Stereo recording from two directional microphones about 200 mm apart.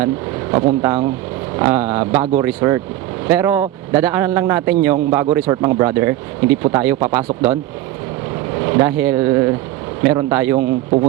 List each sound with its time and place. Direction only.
0.5 s speech: 15° right (ahead or behind)
8.6 s speech: 15° right (ahead or behind)